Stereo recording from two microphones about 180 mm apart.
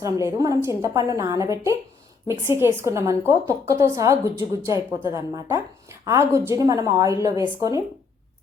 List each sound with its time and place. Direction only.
0.0 s a woman's voice: 15° right (ahead or behind)